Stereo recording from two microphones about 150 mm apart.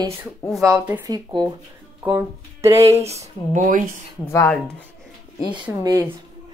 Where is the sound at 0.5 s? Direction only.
Centre (ahead or behind).